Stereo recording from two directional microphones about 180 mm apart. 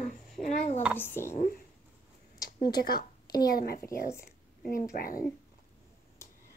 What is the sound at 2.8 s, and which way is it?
A woman's voice, 55° left (ahead or behind).